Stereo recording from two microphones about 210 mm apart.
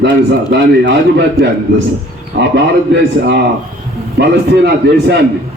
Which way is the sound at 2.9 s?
55° right (ahead or behind).